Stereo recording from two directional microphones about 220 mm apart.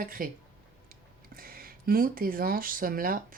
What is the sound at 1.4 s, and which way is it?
Speech, 40° right (ahead or behind).